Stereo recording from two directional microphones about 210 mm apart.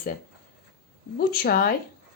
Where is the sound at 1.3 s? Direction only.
45° left (ahead or behind).